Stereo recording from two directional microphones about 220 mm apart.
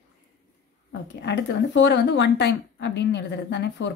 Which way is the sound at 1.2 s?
50° left (ahead or behind).